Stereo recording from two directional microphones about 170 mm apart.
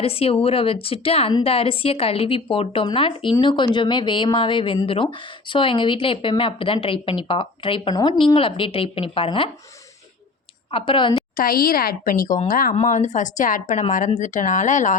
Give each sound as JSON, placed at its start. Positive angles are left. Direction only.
{"t": 0.0, "sound": "a woman's voice", "side_deg": 35}
{"t": 10.7, "sound": "a woman's voice", "side_deg": 30}
{"t": 11.3, "sound": "a woman's voice", "side_deg": 60}
{"t": 12.7, "sound": "a woman's voice", "side_deg": 45}